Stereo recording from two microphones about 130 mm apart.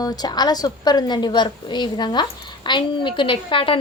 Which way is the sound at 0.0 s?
30° left (ahead or behind).